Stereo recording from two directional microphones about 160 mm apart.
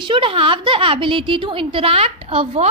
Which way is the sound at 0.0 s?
30° right (ahead or behind).